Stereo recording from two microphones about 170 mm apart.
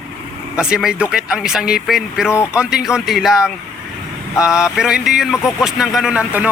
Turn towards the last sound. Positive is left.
turn(degrees=-5)  # may be behind; listen again after turning